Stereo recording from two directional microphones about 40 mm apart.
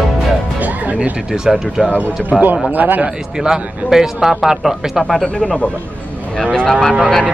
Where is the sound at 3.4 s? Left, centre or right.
Centre.